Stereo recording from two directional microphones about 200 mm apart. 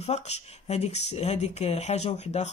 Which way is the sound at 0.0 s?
35° left (ahead or behind).